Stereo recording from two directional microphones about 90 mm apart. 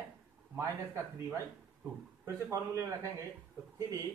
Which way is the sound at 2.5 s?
35° right (ahead or behind).